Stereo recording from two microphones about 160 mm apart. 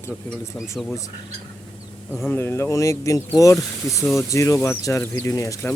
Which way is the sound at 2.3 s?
15° left (ahead or behind).